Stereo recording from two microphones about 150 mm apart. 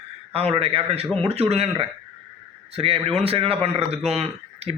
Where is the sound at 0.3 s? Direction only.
40° right (ahead or behind).